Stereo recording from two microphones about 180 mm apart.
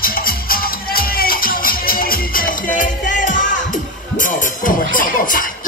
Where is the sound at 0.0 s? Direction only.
55° left (ahead or behind).